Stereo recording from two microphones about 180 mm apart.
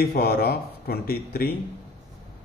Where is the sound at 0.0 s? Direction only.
60° left (ahead or behind).